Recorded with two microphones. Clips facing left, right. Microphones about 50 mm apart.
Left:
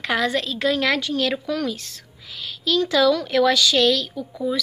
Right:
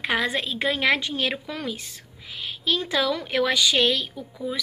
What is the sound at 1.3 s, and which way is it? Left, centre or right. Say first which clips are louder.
A woman's voice: left 6 dB; centre.